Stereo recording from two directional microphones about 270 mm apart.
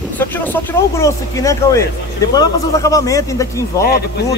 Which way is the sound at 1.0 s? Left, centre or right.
Centre.